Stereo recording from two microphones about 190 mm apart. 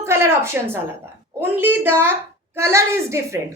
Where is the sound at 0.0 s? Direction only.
15° right (ahead or behind).